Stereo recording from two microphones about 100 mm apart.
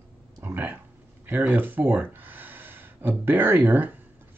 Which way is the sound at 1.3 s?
20° right (ahead or behind).